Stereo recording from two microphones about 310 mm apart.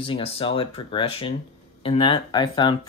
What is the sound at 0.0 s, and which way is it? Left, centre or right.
Speech, centre.